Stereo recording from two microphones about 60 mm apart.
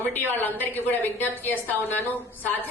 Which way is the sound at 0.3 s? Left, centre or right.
Left.